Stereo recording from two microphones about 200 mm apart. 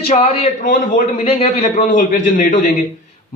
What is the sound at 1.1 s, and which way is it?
A man's voice, 30° left (ahead or behind).